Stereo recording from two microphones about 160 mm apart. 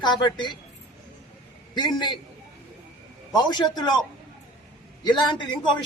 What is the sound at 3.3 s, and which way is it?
Speech, 25° left (ahead or behind).